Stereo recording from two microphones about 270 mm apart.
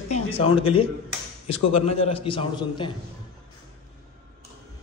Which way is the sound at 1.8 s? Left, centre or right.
Left.